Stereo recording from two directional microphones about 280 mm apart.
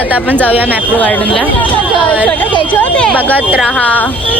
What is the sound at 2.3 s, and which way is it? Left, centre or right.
Speech, centre.